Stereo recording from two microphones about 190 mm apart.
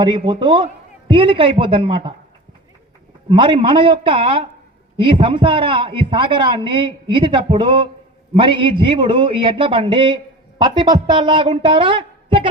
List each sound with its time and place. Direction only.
0.0 s a man's voice: 25° right (ahead or behind)
3.2 s a man's voice: 25° right (ahead or behind)